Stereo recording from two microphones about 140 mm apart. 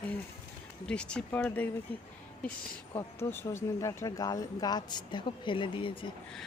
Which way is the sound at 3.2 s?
20° left (ahead or behind).